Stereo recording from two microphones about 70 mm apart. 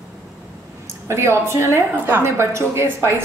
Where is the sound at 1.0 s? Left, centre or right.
Right.